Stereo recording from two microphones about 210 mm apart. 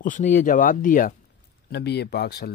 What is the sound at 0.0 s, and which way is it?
Speech, 40° left (ahead or behind).